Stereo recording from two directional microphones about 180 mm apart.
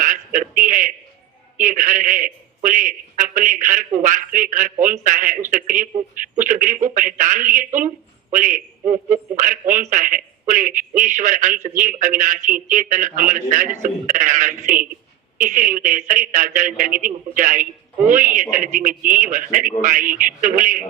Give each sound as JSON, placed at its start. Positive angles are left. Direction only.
{"t": 0.3, "sound": "a man's voice", "side_deg": -45}